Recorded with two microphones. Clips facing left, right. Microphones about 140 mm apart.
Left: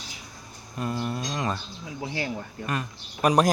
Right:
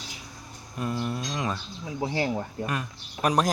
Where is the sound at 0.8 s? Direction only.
Centre (ahead or behind).